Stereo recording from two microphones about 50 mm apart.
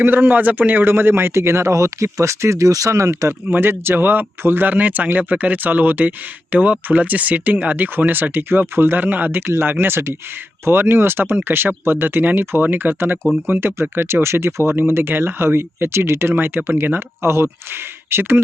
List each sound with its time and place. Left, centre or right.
0.0 s speech: right
3.5 s speech: right
9.5 s speech: right
17.2 s speech: right
18.1 s speech: right